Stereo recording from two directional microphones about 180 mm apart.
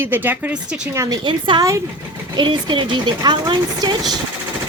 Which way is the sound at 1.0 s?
25° right (ahead or behind).